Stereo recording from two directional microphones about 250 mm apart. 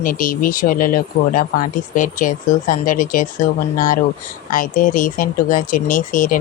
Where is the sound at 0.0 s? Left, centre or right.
Left.